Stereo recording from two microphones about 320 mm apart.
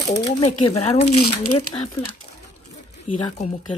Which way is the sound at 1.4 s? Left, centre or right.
Left.